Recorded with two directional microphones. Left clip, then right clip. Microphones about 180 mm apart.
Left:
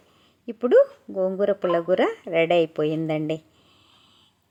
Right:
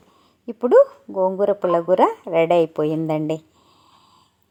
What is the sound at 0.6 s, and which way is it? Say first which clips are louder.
Speech: right 4 dB; 45° right (ahead or behind).